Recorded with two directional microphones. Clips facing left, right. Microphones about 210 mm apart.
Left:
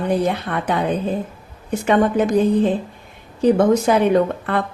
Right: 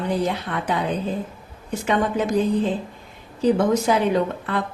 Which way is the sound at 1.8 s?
60° left (ahead or behind).